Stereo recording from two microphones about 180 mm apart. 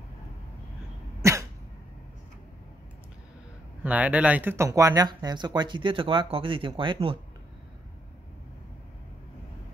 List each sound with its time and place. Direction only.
1.2 s cough: 15° right (ahead or behind)
3.8 s speech: 10° right (ahead or behind); by 7.2 s 30° right (ahead or behind)